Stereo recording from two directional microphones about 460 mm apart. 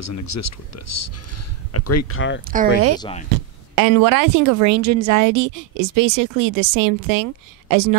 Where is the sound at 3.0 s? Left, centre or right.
Centre.